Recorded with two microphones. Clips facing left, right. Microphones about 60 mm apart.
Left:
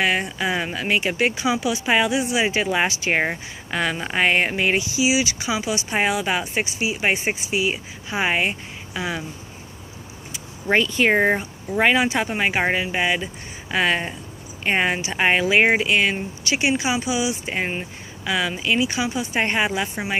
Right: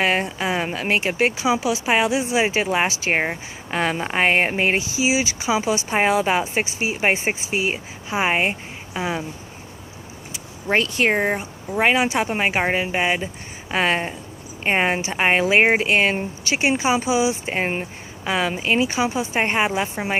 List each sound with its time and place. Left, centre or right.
0.0 s speech: right
8.1 s speech: right
11.0 s speech: centre; by 19.9 s right